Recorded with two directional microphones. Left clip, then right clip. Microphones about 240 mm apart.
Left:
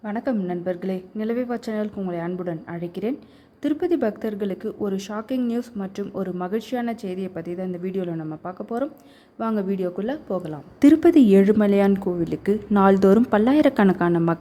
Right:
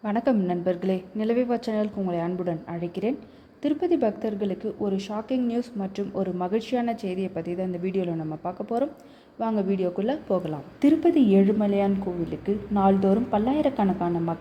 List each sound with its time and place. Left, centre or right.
0.0 s a woman's voice: centre
10.8 s a woman's voice: left